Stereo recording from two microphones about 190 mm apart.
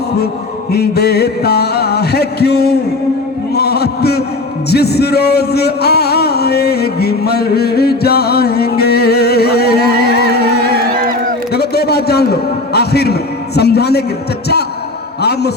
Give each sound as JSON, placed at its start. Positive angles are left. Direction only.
{"t": 0.7, "sound": "music", "side_deg": 60}
{"t": 3.5, "sound": "heart sounds", "side_deg": 60}
{"t": 4.7, "sound": "music", "side_deg": 60}
{"t": 11.5, "sound": "a sound", "side_deg": 60}
{"t": 13.6, "sound": "music", "side_deg": 60}
{"t": 15.2, "sound": "a man's voice", "side_deg": 60}